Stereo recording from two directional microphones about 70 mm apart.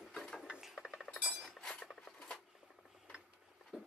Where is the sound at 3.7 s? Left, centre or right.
Centre.